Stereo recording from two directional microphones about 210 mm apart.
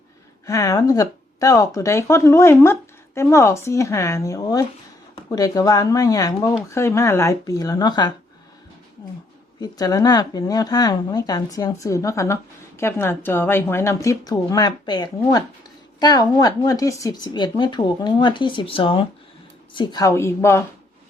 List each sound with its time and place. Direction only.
0.4 s a woman's voice: 15° left (ahead or behind)
9.6 s a woman's voice: 15° left (ahead or behind)